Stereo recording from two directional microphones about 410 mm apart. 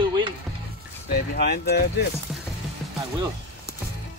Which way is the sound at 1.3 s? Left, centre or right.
Left.